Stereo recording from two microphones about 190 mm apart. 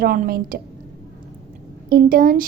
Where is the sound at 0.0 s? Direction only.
50° right (ahead or behind).